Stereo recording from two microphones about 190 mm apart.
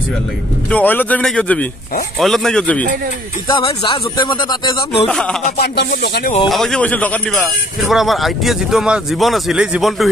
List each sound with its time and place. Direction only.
0.7 s a man's voice: 10° left (ahead or behind)
3.4 s speech: 25° left (ahead or behind)
5.0 s speech: 5° left (ahead or behind)
5.6 s speech: 60° left (ahead or behind)
6.5 s speech: centre (ahead or behind)